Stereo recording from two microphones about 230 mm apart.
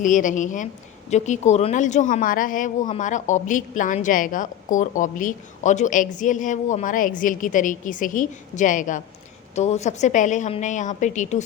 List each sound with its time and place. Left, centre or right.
0.0 s speech: left